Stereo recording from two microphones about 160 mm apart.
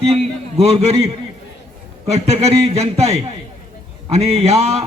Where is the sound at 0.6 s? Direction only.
45° right (ahead or behind).